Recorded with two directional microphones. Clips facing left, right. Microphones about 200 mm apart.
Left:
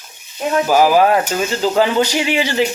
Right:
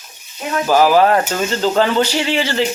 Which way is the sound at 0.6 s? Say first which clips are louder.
Right 1 dB; 15° left (ahead or behind).